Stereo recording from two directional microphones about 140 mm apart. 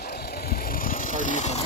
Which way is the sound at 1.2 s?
60° left (ahead or behind).